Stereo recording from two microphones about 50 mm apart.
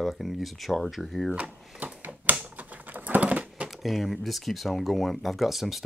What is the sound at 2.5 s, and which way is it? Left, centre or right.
Typing, right.